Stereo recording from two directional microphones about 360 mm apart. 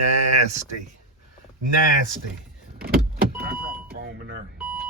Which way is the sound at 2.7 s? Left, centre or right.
Right.